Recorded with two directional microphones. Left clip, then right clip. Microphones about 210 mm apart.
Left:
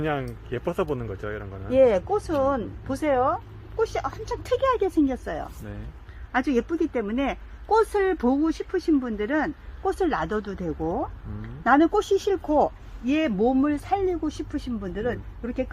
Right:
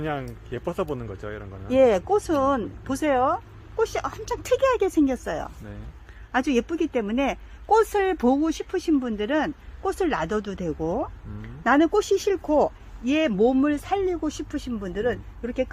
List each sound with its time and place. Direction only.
0.0 s speech: centre (ahead or behind)
0.9 s speech: 15° right (ahead or behind)
1.1 s speech: 5° right (ahead or behind)
1.7 s speech: 60° right (ahead or behind)